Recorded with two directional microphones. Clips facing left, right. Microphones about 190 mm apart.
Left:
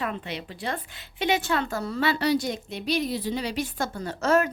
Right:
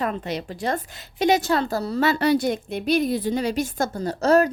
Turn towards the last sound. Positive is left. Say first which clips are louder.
# right 5 dB
turn(degrees=-35)  # may be behind; listen again after turning